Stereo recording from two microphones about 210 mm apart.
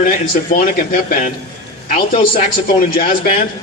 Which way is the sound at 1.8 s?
30° left (ahead or behind).